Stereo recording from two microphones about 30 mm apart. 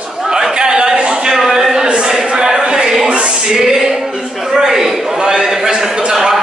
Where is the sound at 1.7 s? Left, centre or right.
Right.